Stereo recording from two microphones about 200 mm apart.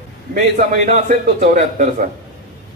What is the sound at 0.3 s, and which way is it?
A man's voice, 45° right (ahead or behind).